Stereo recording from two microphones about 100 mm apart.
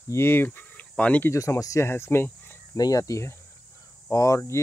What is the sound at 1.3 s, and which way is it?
Speech, 30° left (ahead or behind).